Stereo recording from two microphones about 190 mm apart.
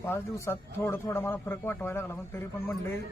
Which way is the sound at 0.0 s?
15° left (ahead or behind).